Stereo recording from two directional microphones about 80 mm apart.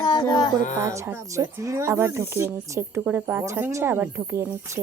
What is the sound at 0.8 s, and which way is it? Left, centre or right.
Speech, right.